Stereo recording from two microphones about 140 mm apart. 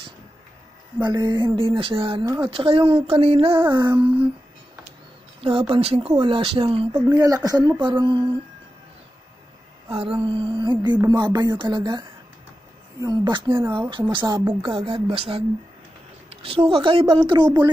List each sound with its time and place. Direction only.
0.9 s speech: 30° right (ahead or behind)
2.2 s speech: 25° right (ahead or behind)
2.5 s speech: 40° right (ahead or behind)
5.4 s speech: 40° right (ahead or behind)
7.1 s speech: 25° right (ahead or behind)
10.2 s speech: 35° right (ahead or behind)
13.6 s speech: 15° right (ahead or behind)
14.1 s speech: 30° right (ahead or behind)